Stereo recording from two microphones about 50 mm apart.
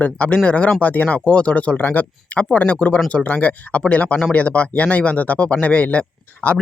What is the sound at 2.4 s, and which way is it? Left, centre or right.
Speech, left.